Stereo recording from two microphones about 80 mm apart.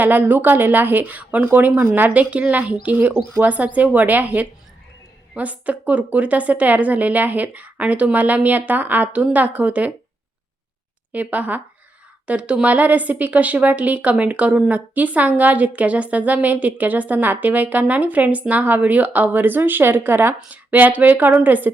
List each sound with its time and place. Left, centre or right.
0.0 s a woman's voice: right
11.1 s a woman's voice: centre